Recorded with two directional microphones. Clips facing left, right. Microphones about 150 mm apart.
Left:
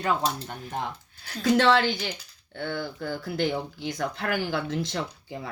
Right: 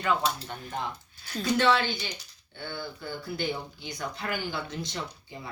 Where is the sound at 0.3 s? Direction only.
50° left (ahead or behind).